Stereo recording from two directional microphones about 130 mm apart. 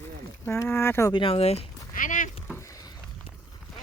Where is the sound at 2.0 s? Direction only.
90° left.